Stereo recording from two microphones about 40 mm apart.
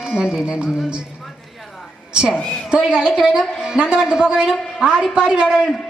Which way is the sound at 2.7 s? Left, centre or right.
Right.